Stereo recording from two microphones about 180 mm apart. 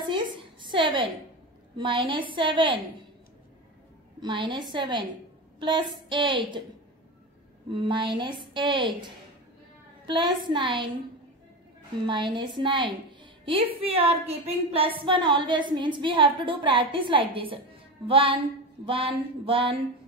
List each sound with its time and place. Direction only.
0.0 s a sound: 25° right (ahead or behind)
1.8 s a woman's voice: 30° right (ahead or behind)
4.2 s a woman's voice: 25° right (ahead or behind)
7.7 s a woman's voice: 25° right (ahead or behind)
12.4 s a woman's voice: 25° right (ahead or behind)